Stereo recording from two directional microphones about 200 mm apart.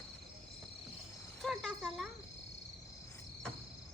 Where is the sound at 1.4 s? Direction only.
Centre (ahead or behind).